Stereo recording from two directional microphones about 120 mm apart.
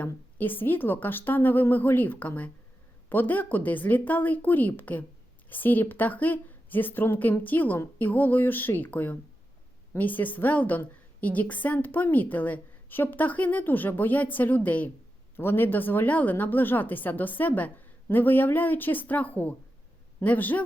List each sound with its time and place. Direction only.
0.0 s a woman's voice: 15° left (ahead or behind)